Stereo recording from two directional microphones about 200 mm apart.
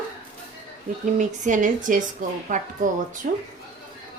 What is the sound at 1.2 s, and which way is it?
A woman's voice, 40° right (ahead or behind).